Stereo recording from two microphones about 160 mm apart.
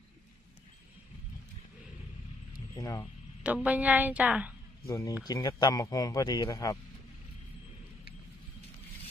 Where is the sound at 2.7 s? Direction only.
20° left (ahead or behind).